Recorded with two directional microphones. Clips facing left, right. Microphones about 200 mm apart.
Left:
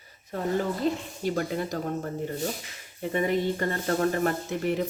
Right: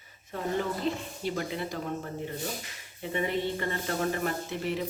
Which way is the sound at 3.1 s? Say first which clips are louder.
Left 4 dB; 45° left (ahead or behind).